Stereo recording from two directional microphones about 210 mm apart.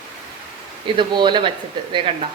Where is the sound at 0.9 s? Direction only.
20° right (ahead or behind).